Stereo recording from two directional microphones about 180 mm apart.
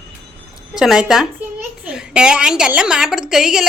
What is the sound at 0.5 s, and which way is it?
A woman's voice, 5° right (ahead or behind).